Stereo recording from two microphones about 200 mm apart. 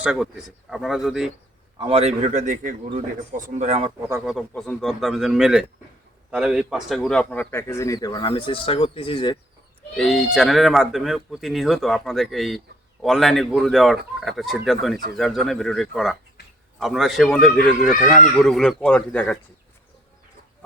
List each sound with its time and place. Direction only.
0.0 s speech: 5° right (ahead or behind)
1.8 s a man's voice: 30° right (ahead or behind)
4.1 s speech: 5° right (ahead or behind); by 9.4 s 25° left (ahead or behind)
10.0 s speech: centre (ahead or behind)